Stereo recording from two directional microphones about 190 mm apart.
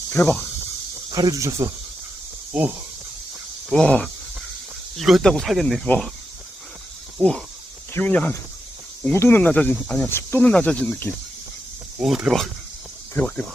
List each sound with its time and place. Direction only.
0.2 s speech: 15° left (ahead or behind)
1.1 s speech: 20° right (ahead or behind)
2.5 s speech: 5° right (ahead or behind)
3.7 s speech: 5° left (ahead or behind)
7.2 s speech: 5° left (ahead or behind)
11.9 s speech: 5° right (ahead or behind)